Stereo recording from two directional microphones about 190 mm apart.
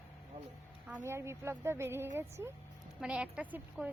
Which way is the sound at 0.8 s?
10° right (ahead or behind).